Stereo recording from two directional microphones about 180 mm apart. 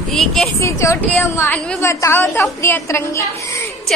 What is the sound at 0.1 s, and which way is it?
Speech, centre (ahead or behind).